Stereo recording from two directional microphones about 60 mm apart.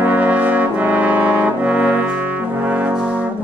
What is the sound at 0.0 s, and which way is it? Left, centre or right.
Brass instrument, right.